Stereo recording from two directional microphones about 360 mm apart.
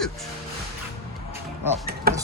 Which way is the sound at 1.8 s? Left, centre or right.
Right.